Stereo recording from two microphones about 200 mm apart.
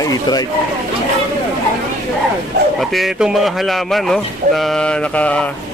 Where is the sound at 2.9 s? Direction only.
Centre (ahead or behind).